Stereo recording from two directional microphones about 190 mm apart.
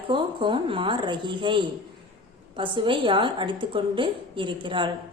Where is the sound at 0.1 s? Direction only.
25° right (ahead or behind).